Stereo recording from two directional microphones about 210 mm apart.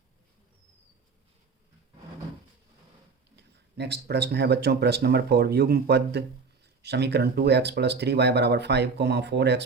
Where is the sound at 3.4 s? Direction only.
50° right (ahead or behind).